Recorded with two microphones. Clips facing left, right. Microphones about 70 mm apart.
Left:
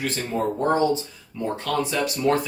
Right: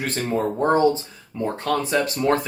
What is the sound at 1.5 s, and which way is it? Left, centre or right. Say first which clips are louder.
Speech: right 3 dB; right.